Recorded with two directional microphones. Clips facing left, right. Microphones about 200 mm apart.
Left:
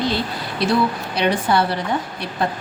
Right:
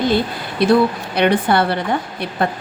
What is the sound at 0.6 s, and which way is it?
A woman's voice, 55° right (ahead or behind).